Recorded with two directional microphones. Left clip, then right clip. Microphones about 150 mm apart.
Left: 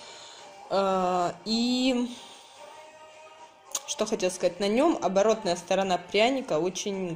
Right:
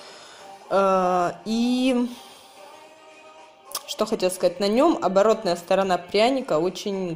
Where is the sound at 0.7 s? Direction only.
10° right (ahead or behind).